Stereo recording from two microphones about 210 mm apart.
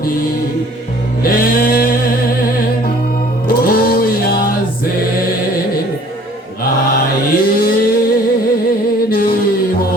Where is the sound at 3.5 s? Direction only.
45° left (ahead or behind).